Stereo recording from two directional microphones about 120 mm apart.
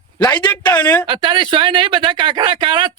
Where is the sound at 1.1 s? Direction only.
40° right (ahead or behind).